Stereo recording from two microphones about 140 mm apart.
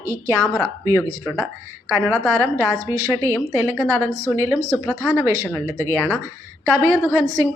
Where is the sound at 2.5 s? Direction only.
20° right (ahead or behind).